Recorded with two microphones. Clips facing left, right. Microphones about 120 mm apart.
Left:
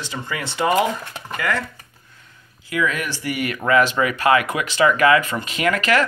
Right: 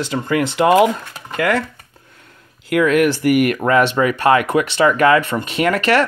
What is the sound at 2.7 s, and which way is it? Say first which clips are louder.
Speech: right 9 dB; 65° right (ahead or behind).